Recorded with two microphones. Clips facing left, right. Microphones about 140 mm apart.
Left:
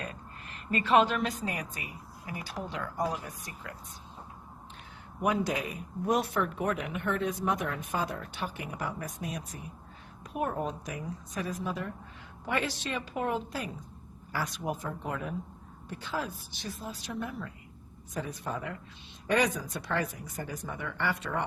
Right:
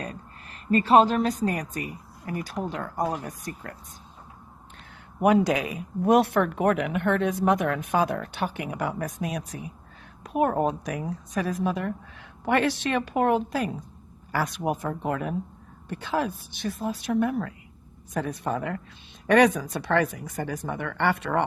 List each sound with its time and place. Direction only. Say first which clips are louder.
0.7 s a woman's voice: right 6 dB; 35° right (ahead or behind)
5.2 s speech: right 8 dB; 75° right (ahead or behind)
10.2 s a woman's voice: right 9 dB; 75° right (ahead or behind)